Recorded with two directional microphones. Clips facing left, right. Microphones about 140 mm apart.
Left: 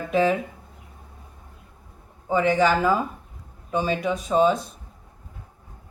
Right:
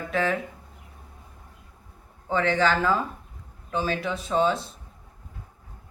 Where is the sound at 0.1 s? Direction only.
15° left (ahead or behind).